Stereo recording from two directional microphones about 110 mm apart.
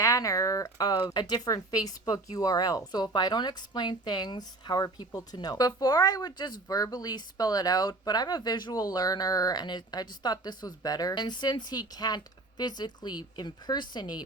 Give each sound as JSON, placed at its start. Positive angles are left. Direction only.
{"t": 0.0, "sound": "speech", "side_deg": 30}